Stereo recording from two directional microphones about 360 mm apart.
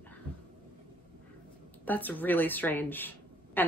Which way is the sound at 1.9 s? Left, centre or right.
Centre.